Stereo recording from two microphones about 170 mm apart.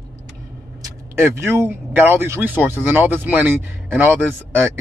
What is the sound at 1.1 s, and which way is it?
Speech, 15° right (ahead or behind).